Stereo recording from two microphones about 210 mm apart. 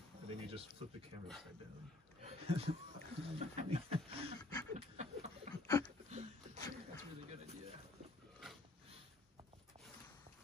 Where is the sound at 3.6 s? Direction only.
30° right (ahead or behind).